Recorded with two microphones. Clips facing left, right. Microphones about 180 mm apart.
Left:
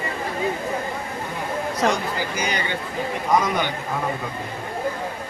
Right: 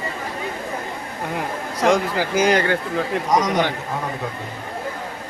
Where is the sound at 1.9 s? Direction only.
90° right.